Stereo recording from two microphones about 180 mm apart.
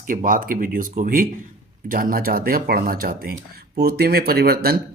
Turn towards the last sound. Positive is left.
turn(degrees=-60)  # may be behind; listen again after turning